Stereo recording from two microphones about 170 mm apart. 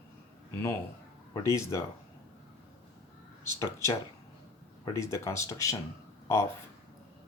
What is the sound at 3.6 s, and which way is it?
Speech, 15° left (ahead or behind).